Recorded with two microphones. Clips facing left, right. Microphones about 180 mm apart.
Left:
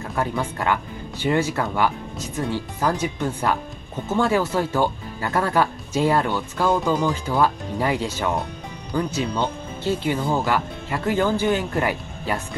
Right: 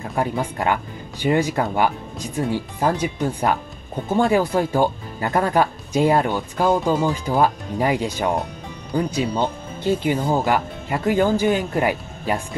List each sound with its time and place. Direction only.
0.1 s speech: 20° right (ahead or behind)